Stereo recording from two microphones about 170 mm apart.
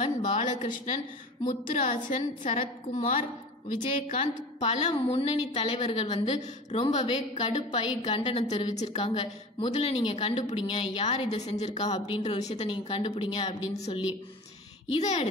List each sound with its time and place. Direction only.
0.2 s a woman's voice: 45° left (ahead or behind)